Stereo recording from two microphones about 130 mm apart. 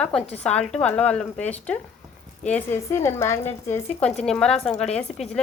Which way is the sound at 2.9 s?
20° left (ahead or behind).